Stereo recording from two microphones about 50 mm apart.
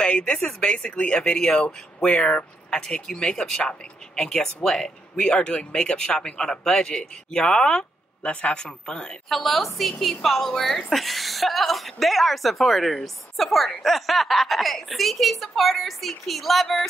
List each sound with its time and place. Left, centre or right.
0.0 s a sound: left
0.6 s speech: centre
8.2 s speech: left
9.3 s a woman's voice: centre